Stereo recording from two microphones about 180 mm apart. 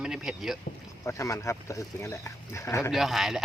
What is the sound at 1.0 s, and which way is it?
A man's voice, 15° left (ahead or behind).